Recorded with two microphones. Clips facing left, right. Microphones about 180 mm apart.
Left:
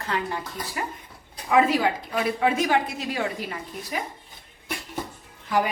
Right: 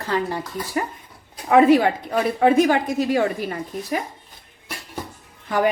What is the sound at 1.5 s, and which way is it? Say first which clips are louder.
Speech: right 7 dB; 60° right (ahead or behind).